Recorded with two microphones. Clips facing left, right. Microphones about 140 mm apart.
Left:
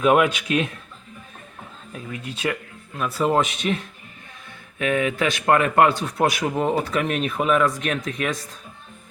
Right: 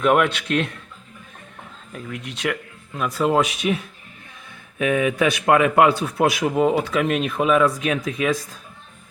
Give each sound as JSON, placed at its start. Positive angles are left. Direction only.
{"t": 0.0, "sound": "speech", "side_deg": 10}
{"t": 1.9, "sound": "speech", "side_deg": 5}
{"t": 2.1, "sound": "speech", "side_deg": -80}
{"t": 3.0, "sound": "speech", "side_deg": 0}